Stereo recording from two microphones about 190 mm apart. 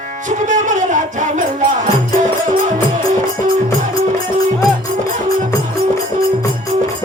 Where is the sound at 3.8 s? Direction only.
40° right (ahead or behind).